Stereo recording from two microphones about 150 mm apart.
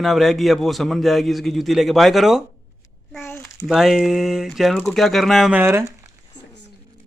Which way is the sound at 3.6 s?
Centre (ahead or behind).